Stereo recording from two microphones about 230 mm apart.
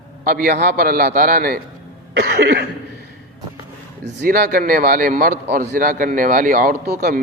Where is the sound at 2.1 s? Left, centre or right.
Right.